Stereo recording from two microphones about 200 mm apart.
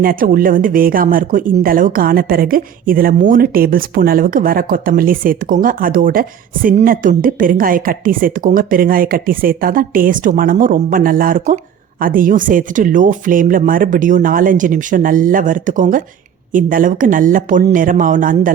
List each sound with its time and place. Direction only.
0.0 s speech: 45° right (ahead or behind)